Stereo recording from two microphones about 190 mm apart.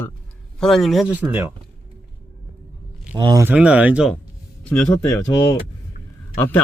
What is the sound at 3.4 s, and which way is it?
Speech, 5° right (ahead or behind).